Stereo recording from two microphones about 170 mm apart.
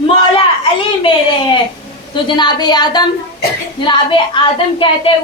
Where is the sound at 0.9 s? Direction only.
30° left (ahead or behind).